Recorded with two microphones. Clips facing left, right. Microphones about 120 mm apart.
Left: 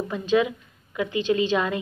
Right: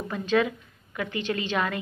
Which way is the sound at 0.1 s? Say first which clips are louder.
Left 2 dB; 20° left (ahead or behind).